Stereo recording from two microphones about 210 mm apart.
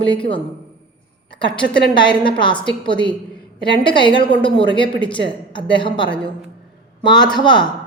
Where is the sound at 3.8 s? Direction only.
25° left (ahead or behind).